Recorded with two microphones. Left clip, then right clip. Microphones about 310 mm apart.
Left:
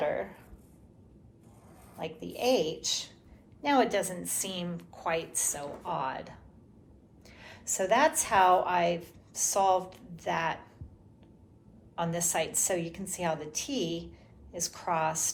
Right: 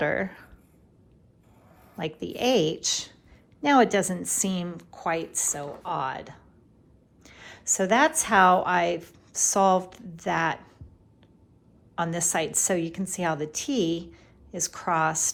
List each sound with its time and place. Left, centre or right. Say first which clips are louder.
0.0 s a sound: right 5 dB; right
2.0 s a woman's voice: right 5 dB; right
11.9 s a woman's voice: right 4 dB; right